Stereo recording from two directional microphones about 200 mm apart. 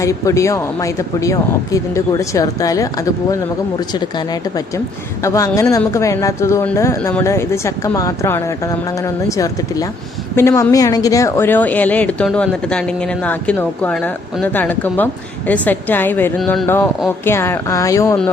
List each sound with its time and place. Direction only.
0.0 s speech: 15° left (ahead or behind)